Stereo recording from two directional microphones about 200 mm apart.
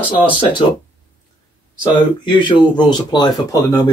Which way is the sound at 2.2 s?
25° left (ahead or behind).